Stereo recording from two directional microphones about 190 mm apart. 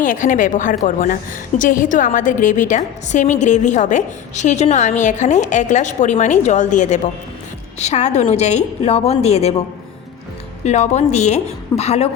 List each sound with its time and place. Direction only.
0.0 s a woman's voice: 45° left (ahead or behind)